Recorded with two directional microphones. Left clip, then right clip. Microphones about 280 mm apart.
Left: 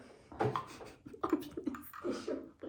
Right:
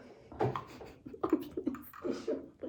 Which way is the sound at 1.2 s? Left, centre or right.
Centre.